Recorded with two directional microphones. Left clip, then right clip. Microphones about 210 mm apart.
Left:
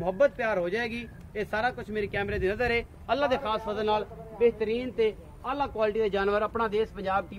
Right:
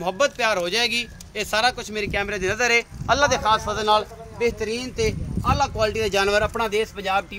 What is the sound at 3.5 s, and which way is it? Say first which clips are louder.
Speech: right 8 dB; 35° right (ahead or behind).